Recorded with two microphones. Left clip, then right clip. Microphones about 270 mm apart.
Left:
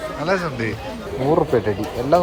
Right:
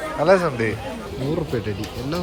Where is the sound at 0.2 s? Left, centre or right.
Centre.